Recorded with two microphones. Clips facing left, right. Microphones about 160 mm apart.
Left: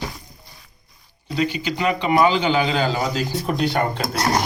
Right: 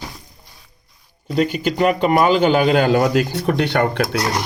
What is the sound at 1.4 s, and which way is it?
A man's voice, 50° right (ahead or behind).